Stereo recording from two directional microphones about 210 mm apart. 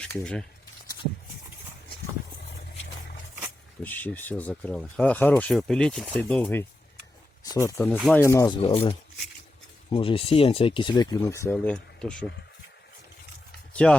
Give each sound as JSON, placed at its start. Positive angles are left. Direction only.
{"t": 0.0, "sound": "speech", "side_deg": 5}
{"t": 3.8, "sound": "speech", "side_deg": 10}
{"t": 7.9, "sound": "speech", "side_deg": 0}
{"t": 8.2, "sound": "speech", "side_deg": 15}
{"t": 13.8, "sound": "speech", "side_deg": 5}